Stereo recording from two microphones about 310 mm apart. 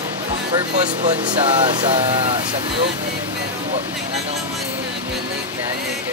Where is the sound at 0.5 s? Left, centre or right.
Right.